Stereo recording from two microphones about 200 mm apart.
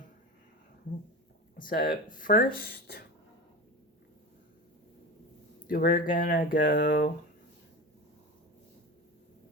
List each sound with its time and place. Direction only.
1.5 s speech: 45° left (ahead or behind)
5.6 s speech: 45° left (ahead or behind)